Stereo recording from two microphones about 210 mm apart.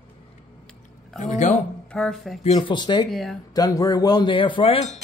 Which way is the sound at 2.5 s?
20° left (ahead or behind).